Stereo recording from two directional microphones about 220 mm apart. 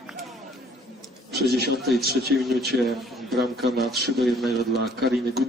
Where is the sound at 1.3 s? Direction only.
45° right (ahead or behind).